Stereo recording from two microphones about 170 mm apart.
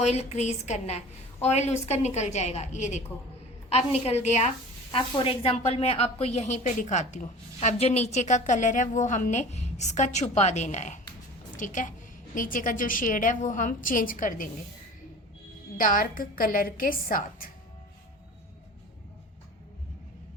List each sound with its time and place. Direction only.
0.0 s a woman's voice: 40° left (ahead or behind)
4.9 s a woman's voice: 30° left (ahead or behind); by 14.4 s 50° left (ahead or behind)
15.8 s a woman's voice: 55° left (ahead or behind)